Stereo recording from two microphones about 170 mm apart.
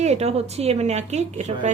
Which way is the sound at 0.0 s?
40° right (ahead or behind).